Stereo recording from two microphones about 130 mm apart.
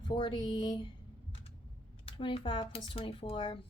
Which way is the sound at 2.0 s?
45° left (ahead or behind).